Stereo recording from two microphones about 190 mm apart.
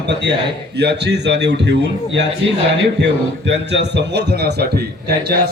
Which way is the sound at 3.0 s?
65° right (ahead or behind).